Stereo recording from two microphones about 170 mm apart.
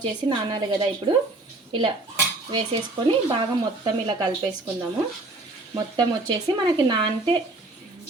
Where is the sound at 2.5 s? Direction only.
25° right (ahead or behind).